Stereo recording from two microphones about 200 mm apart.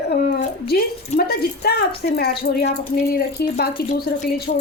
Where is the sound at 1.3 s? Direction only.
50° left (ahead or behind).